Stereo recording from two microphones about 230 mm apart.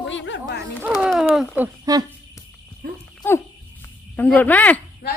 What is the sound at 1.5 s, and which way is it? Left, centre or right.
Speech, centre.